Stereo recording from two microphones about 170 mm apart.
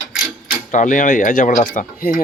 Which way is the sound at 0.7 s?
50° left (ahead or behind).